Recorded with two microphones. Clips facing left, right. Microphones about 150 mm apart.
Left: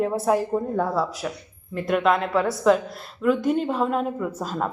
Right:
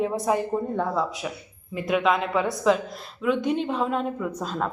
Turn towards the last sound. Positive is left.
turn(degrees=5)  # may be behind; listen again after turning